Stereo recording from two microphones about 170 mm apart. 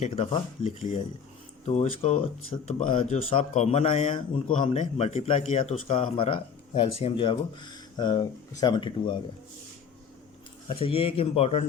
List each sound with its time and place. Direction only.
0.0 s a man's voice: 35° left (ahead or behind)
10.7 s a man's voice: 35° left (ahead or behind)